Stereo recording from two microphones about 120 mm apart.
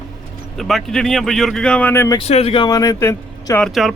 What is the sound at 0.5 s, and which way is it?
Speech, centre (ahead or behind).